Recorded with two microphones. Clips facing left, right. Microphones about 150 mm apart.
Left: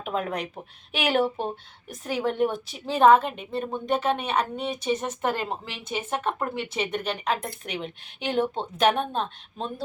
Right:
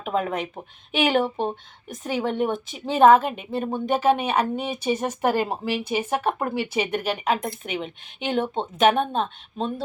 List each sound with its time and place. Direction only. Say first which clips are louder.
0.0 s speech: right 3 dB; centre (ahead or behind)
1.2 s speech: right 1 dB; 25° right (ahead or behind)
1.9 s a woman's voice: right 2 dB; centre (ahead or behind)